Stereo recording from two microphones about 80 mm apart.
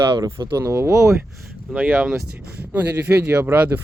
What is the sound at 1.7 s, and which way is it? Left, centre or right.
Speech, right.